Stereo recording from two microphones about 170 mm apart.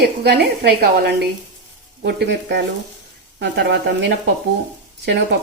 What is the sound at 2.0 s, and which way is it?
Speech, 70° right (ahead or behind).